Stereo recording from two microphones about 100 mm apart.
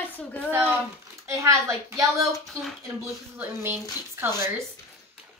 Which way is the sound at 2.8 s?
25° right (ahead or behind).